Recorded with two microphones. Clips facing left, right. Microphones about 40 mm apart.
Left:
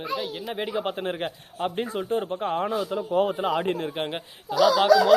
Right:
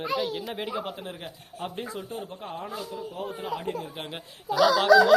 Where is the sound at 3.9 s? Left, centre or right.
Left.